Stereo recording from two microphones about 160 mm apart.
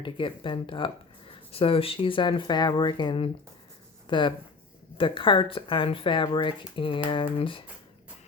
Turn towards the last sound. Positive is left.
turn(degrees=35)  # may be behind; listen again after turning